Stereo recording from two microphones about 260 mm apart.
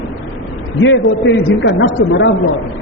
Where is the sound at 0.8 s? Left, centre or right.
Left.